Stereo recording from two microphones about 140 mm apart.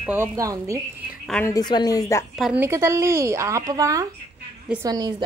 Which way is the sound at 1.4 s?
30° left (ahead or behind).